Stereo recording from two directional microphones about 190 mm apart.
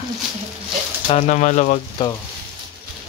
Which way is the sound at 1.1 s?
35° left (ahead or behind).